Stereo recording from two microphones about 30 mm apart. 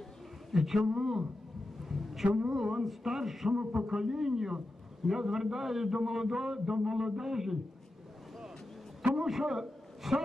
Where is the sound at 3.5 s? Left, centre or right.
Right.